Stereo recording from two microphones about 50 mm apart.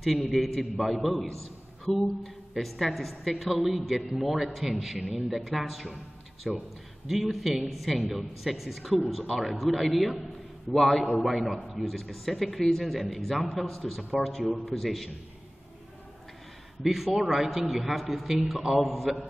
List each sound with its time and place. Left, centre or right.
0.0 s speech: centre
16.8 s speech: centre